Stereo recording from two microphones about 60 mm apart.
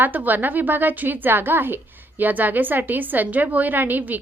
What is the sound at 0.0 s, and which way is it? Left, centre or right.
A woman's voice, right.